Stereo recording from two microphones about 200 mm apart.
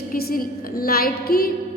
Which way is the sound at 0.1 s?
45° left (ahead or behind).